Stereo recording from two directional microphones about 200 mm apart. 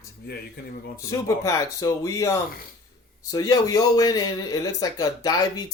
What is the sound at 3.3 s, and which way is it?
Speech, 20° left (ahead or behind).